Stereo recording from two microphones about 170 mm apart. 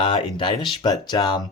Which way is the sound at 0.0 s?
30° left (ahead or behind).